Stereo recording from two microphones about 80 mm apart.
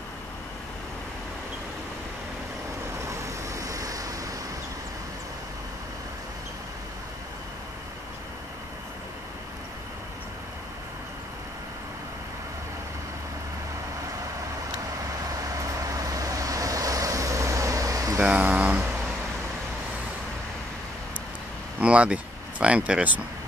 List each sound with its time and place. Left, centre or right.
3.1 s vehicle: right
15.5 s vehicle: right
18.4 s a sound: centre
21.7 s speech: centre